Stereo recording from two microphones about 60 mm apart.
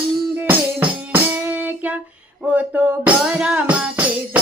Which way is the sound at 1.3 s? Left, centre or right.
Right.